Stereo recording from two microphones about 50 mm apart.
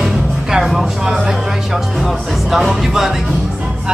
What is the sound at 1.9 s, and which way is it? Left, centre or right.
Music, centre.